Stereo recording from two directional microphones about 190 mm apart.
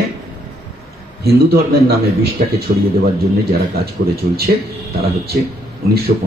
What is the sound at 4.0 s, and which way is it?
Speech, 70° right (ahead or behind).